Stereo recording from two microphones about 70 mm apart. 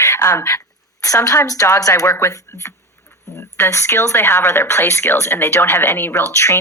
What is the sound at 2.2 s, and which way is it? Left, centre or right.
Speech, left.